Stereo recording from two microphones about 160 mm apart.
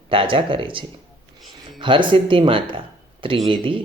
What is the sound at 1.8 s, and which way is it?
Speech, 30° right (ahead or behind).